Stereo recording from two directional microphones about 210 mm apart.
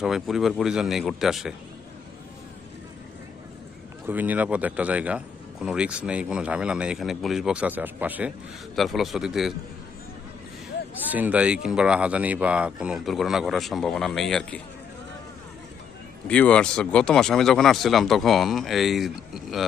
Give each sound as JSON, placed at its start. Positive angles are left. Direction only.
{"t": 0.0, "sound": "a man's voice", "side_deg": 0}
{"t": 4.0, "sound": "a man's voice", "side_deg": -10}
{"t": 11.1, "sound": "a man's voice", "side_deg": -5}
{"t": 16.2, "sound": "a man's voice", "side_deg": 5}